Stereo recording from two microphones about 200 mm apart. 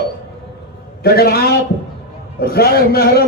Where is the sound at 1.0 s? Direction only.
50° left (ahead or behind).